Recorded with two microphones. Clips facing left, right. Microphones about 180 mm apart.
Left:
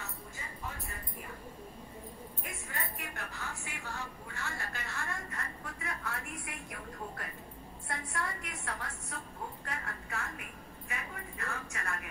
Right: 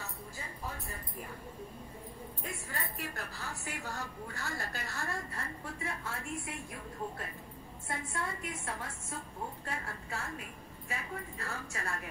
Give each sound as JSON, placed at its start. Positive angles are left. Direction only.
{"t": 2.4, "sound": "a woman's voice", "side_deg": -35}